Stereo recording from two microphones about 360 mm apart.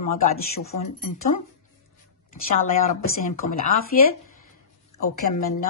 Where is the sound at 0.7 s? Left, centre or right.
Left.